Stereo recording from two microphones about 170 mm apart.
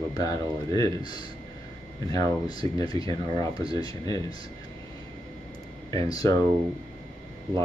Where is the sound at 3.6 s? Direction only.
20° left (ahead or behind).